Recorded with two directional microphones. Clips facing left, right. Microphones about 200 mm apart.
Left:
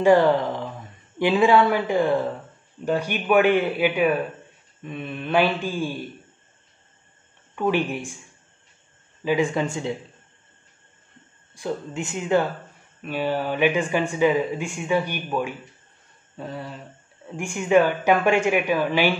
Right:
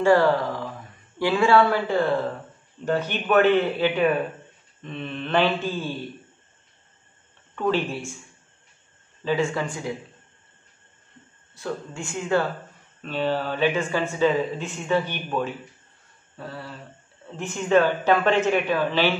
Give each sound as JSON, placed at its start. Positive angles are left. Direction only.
{"t": 0.0, "sound": "speech", "side_deg": 20}
{"t": 7.5, "sound": "speech", "side_deg": 15}
{"t": 9.2, "sound": "speech", "side_deg": 15}
{"t": 11.5, "sound": "speech", "side_deg": 15}